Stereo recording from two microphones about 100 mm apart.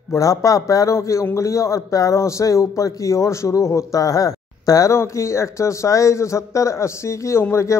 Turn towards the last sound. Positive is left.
turn(degrees=30)  # may be behind; listen again after turning